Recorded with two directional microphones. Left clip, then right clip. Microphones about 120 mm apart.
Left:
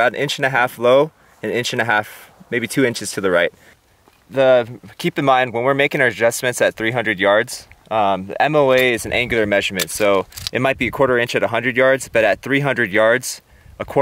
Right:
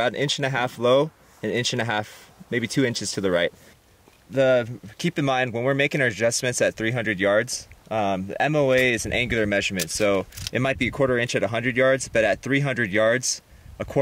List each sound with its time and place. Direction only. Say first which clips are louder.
0.0 s speech: left 6 dB; 25° left (ahead or behind)